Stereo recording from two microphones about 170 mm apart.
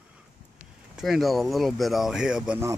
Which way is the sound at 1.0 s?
Centre (ahead or behind).